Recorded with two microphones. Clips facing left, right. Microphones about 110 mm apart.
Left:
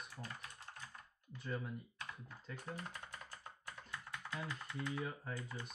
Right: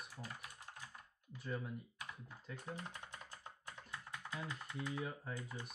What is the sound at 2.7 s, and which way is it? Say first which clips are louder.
Typing: left 1 dB; 20° right (ahead or behind).